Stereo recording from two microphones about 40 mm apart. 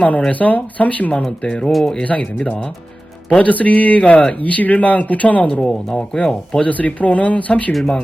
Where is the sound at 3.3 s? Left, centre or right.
Left.